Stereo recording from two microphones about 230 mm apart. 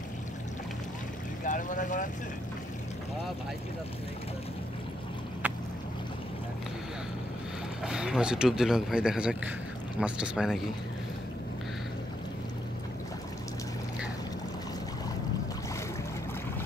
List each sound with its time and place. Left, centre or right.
1.4 s speech: left
7.8 s speech: centre